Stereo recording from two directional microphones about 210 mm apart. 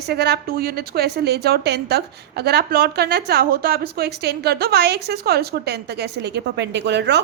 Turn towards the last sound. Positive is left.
turn(degrees=-55)  # may be behind; listen again after turning